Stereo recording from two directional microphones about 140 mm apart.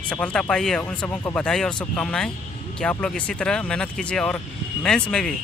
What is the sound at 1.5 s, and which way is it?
Speech, 5° left (ahead or behind).